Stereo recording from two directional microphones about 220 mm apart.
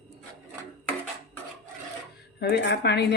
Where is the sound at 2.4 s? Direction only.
45° left (ahead or behind).